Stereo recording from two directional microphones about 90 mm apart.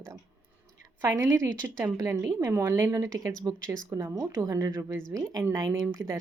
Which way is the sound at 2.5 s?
25° right (ahead or behind).